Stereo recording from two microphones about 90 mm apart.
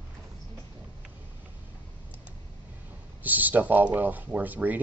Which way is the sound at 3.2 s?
20° right (ahead or behind).